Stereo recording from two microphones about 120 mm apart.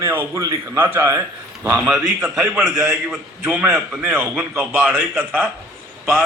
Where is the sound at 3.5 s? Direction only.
10° right (ahead or behind).